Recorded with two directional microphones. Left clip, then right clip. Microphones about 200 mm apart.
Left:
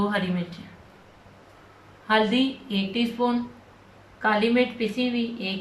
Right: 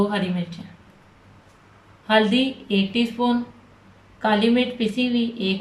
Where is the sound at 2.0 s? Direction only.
15° right (ahead or behind).